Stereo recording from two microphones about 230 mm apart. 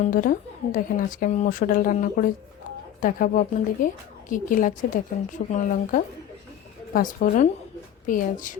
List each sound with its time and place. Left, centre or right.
0.1 s speech: left